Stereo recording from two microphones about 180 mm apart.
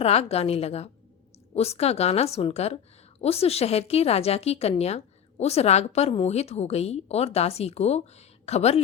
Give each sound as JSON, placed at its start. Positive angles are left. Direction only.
{"t": 0.0, "sound": "a woman's voice", "side_deg": 35}